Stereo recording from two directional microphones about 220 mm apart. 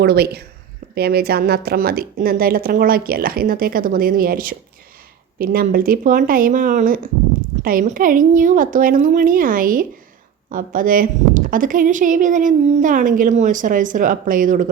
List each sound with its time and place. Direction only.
0.0 s a woman's voice: 45° right (ahead or behind)